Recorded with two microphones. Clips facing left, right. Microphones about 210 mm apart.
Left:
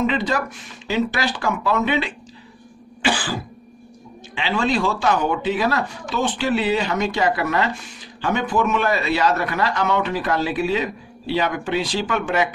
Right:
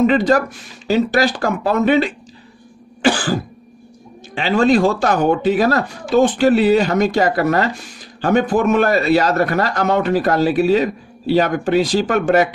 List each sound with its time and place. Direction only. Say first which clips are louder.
0.0 s speech: right 7 dB; 45° right (ahead or behind)
3.0 s cough: right 6 dB; 45° right (ahead or behind)
4.4 s speech: right 7 dB; 45° right (ahead or behind)